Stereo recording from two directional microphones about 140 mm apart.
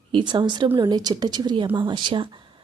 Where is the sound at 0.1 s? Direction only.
35° right (ahead or behind).